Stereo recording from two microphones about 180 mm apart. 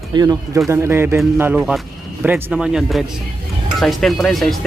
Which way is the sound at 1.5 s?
Centre (ahead or behind).